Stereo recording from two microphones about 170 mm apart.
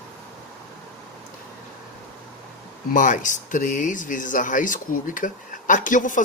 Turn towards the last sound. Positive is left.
turn(degrees=50)  # may be behind; listen again after turning